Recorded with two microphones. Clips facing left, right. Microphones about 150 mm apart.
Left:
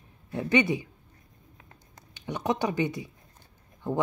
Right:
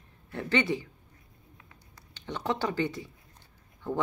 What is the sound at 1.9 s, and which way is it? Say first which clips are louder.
Speech: left 3 dB; 15° left (ahead or behind).